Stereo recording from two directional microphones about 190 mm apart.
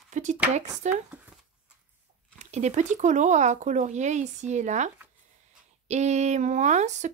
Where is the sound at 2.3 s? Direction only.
40° right (ahead or behind).